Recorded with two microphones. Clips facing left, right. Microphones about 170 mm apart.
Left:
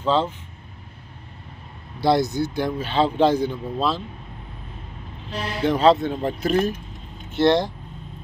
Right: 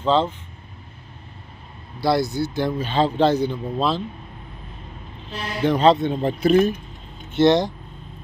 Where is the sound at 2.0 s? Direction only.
20° left (ahead or behind); by 4.0 s centre (ahead or behind).